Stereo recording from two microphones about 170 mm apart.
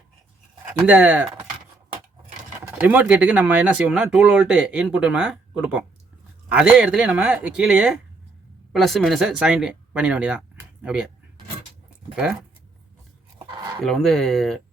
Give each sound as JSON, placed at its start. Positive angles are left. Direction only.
{"t": 0.8, "sound": "speech", "side_deg": -10}
{"t": 2.8, "sound": "speech", "side_deg": -10}
{"t": 12.1, "sound": "speech", "side_deg": -5}
{"t": 13.5, "sound": "a sound", "side_deg": -30}
{"t": 13.8, "sound": "speech", "side_deg": 0}